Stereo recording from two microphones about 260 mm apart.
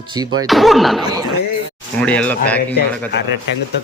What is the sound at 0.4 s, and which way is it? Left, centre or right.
Speech, centre.